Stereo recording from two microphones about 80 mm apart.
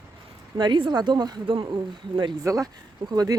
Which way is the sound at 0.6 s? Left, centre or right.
Right.